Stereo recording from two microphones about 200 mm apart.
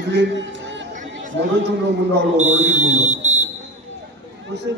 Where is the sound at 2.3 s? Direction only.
35° right (ahead or behind).